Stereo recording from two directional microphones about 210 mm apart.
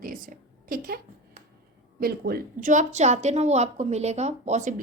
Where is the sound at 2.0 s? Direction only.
45° right (ahead or behind).